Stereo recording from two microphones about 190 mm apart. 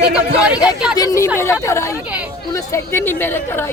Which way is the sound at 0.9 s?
15° left (ahead or behind).